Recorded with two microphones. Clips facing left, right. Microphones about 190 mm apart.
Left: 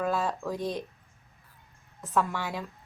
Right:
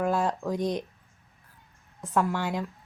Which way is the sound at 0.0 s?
15° right (ahead or behind).